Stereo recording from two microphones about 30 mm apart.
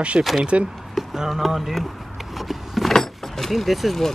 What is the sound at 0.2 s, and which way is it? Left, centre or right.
Speech, right.